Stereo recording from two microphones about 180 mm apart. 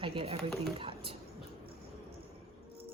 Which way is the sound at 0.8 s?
30° right (ahead or behind).